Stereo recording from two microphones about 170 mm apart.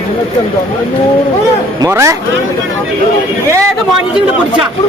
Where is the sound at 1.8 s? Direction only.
15° right (ahead or behind).